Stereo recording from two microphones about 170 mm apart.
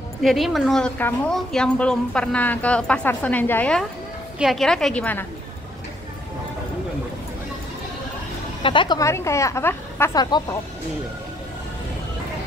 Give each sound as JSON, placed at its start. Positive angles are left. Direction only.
{"t": 0.2, "sound": "a woman's voice", "side_deg": 0}
{"t": 8.6, "sound": "a woman's voice", "side_deg": 25}